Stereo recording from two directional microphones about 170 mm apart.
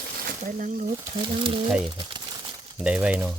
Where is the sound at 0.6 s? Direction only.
45° right (ahead or behind).